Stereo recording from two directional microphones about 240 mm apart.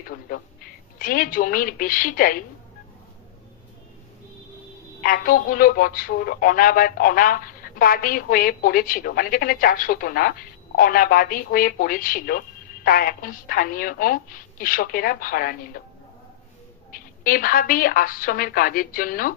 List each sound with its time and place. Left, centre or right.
0.3 s a woman's voice: left
5.0 s a woman's voice: left
16.9 s a woman's voice: left